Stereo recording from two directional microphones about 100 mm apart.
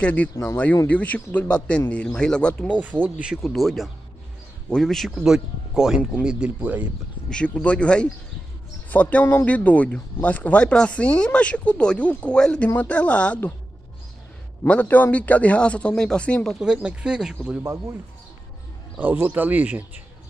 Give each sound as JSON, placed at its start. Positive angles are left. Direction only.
{"t": 0.0, "sound": "speech", "side_deg": 15}
{"t": 0.3, "sound": "speech", "side_deg": 30}
{"t": 0.8, "sound": "speech", "side_deg": 15}
{"t": 2.8, "sound": "speech", "side_deg": -15}
{"t": 3.4, "sound": "speech", "side_deg": 0}
{"t": 7.2, "sound": "speech", "side_deg": 10}
{"t": 14.6, "sound": "speech", "side_deg": 15}
{"t": 16.5, "sound": "speech", "side_deg": -10}
{"t": 18.9, "sound": "speech", "side_deg": -20}